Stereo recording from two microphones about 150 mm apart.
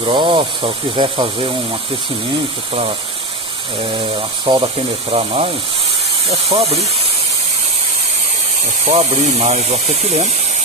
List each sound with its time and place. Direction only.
0.0 s speech: 35° right (ahead or behind)
4.5 s speech: 35° right (ahead or behind)
8.8 s speech: 45° right (ahead or behind)